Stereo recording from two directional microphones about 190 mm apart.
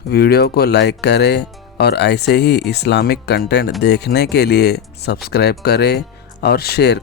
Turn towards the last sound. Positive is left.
turn(degrees=60)  # may be behind; listen again after turning